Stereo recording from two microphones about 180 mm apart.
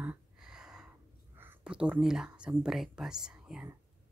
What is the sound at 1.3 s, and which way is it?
Speech, 10° right (ahead or behind).